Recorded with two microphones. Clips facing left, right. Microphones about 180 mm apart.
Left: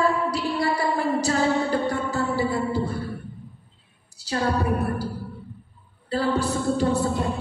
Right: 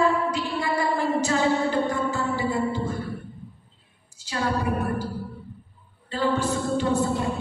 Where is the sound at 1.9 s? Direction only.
35° left (ahead or behind).